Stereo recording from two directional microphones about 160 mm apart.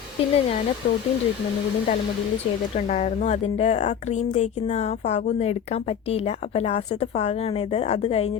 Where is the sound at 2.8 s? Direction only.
50° left (ahead or behind).